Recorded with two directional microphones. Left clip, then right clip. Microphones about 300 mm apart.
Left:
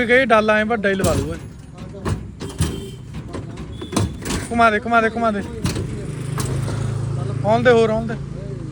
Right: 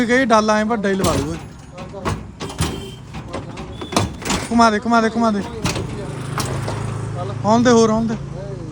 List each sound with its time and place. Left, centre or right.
0.0 s speech: centre
0.9 s speech: centre
2.0 s a sound: centre
3.9 s a sound: centre
4.5 s speech: centre
5.4 s vehicle: centre
7.5 s speech: centre